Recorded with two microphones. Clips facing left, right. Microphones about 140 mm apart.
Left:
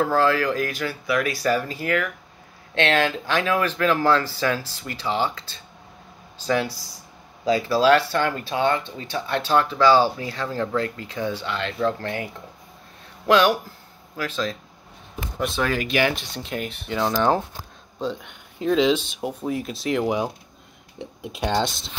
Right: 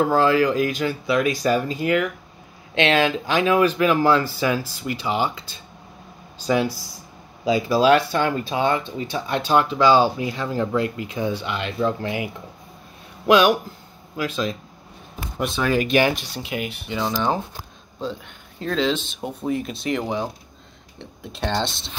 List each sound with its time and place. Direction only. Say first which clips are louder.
0.0 s speech: right 3 dB; 15° right (ahead or behind)
13.3 s speech: right 2 dB; 15° right (ahead or behind)
15.6 s speech: right 4 dB; 20° right (ahead or behind)
16.2 s speech: right 1 dB; 5° right (ahead or behind)
18.6 s speech: left 3 dB; 10° left (ahead or behind)